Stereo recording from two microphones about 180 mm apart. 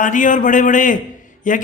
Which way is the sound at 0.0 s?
45° left (ahead or behind).